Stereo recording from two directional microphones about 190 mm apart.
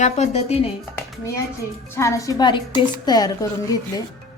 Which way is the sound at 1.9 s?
15° left (ahead or behind).